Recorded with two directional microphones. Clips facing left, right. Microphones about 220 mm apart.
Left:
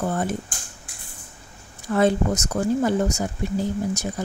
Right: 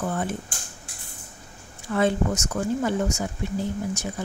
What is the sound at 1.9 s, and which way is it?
A woman's voice, 40° left (ahead or behind).